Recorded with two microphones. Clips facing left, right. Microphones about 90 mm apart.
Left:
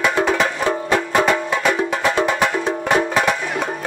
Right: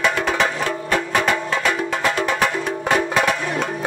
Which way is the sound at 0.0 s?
15° left (ahead or behind).